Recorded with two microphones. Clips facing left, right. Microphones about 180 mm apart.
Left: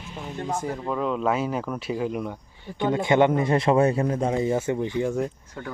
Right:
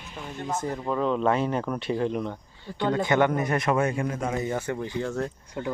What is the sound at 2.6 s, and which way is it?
A man's voice, 20° left (ahead or behind).